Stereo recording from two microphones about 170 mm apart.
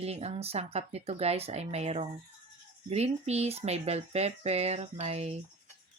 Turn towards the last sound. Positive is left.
turn(degrees=-40)  # may be behind; listen again after turning